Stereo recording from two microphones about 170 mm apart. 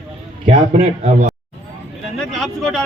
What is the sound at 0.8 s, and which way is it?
Speech, 40° right (ahead or behind).